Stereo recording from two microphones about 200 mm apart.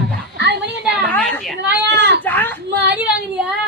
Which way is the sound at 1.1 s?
5° left (ahead or behind).